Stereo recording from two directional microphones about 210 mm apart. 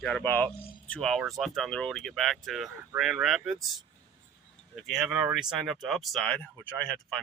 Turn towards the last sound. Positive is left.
turn(degrees=5)  # may be behind; listen again after turning